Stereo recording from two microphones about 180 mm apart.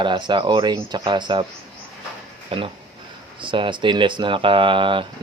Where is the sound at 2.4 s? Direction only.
30° right (ahead or behind).